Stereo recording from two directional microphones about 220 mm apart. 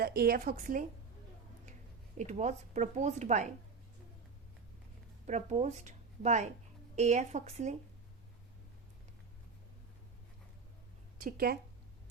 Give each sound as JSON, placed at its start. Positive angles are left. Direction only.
{"t": 0.0, "sound": "a woman's voice", "side_deg": -45}
{"t": 2.1, "sound": "a woman's voice", "side_deg": -30}
{"t": 5.2, "sound": "a woman's voice", "side_deg": -30}
{"t": 11.2, "sound": "speech", "side_deg": -40}